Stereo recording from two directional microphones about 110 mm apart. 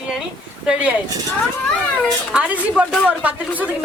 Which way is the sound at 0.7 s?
10° right (ahead or behind).